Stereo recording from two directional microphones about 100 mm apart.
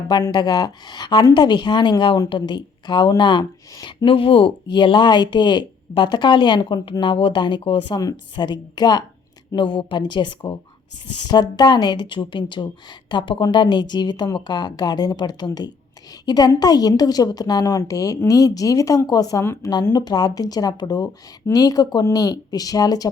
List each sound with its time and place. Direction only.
0.3 s speech: 40° left (ahead or behind)
7.0 s speech: 60° left (ahead or behind)
7.9 s speech: 45° left (ahead or behind)
9.6 s a woman's voice: 55° left (ahead or behind); by 23.0 s 40° left (ahead or behind)